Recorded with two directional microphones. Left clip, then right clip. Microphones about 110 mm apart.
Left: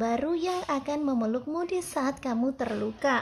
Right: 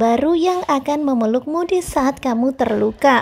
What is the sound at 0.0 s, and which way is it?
A woman's voice, 50° right (ahead or behind).